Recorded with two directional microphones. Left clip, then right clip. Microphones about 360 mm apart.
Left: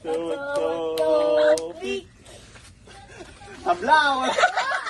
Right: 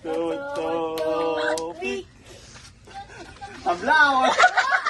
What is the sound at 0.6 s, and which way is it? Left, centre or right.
Music, centre.